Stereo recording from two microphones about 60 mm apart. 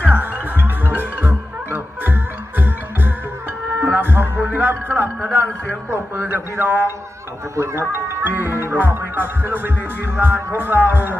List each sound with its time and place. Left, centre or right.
0.1 s music: right
7.5 s speech: right
7.8 s music: right